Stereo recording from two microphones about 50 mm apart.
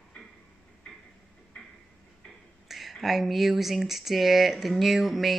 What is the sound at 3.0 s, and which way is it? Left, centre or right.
Speech, centre.